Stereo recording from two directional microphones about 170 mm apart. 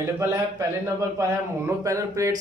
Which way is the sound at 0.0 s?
15° right (ahead or behind).